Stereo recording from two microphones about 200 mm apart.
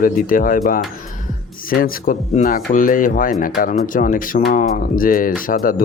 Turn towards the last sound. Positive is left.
turn(degrees=45)  # may be behind; listen again after turning